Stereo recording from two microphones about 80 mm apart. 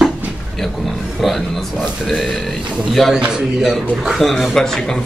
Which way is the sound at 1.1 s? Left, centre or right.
Centre.